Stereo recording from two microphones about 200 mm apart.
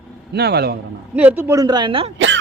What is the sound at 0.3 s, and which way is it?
Speech, 55° right (ahead or behind).